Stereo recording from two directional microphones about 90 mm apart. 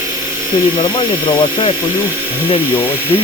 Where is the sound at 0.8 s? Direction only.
65° left (ahead or behind).